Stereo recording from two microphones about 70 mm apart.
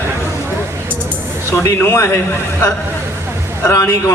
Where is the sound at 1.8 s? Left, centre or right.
Left.